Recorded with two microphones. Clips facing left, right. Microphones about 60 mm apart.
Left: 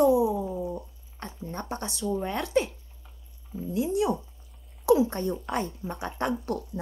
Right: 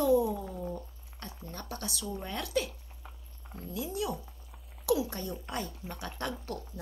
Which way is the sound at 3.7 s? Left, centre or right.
Left.